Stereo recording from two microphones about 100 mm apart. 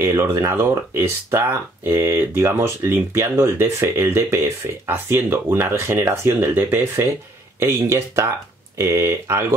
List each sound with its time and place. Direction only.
0.0 s speech: 25° right (ahead or behind)